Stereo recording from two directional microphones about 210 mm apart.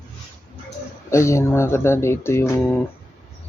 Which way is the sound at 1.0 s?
15° left (ahead or behind).